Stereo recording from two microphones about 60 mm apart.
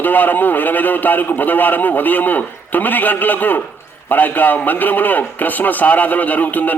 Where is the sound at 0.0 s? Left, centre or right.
Left.